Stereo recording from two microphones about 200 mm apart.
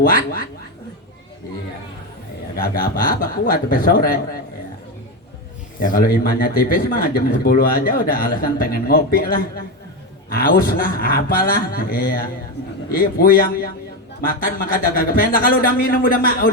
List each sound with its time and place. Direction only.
0.0 s speech: 45° left (ahead or behind)
2.6 s speech: 45° left (ahead or behind)
5.8 s speech: 45° left (ahead or behind)